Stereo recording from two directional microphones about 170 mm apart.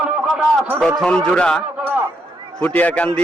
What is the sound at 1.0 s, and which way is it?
A man's voice, 5° left (ahead or behind).